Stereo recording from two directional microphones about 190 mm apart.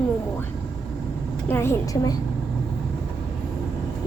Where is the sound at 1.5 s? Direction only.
15° left (ahead or behind).